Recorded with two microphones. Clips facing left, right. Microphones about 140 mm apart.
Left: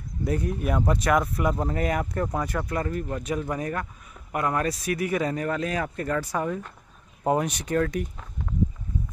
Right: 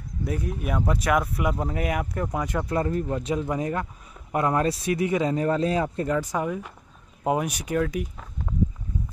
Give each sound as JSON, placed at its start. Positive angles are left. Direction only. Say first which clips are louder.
{"t": 0.2, "sound": "speech", "louder": "left 2 dB", "side_deg": 0}
{"t": 2.3, "sound": "speech", "louder": "right 2 dB", "side_deg": -20}
{"t": 6.1, "sound": "speech", "louder": "right 1 dB", "side_deg": -15}